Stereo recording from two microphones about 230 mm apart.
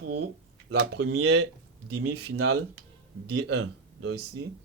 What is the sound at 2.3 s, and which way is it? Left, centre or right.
Speech, right.